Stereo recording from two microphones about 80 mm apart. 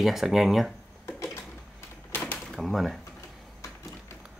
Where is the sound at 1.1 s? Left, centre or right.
Left.